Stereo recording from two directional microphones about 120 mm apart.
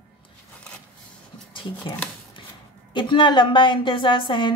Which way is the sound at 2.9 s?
40° left (ahead or behind).